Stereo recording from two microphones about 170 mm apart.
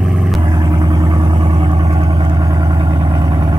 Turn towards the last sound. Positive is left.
turn(degrees=-20)  # may be behind; listen again after turning